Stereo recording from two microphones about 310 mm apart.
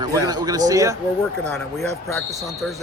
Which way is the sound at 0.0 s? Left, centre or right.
Centre.